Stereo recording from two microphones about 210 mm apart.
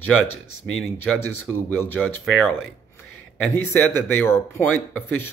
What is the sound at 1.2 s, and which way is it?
Speech, 90° left.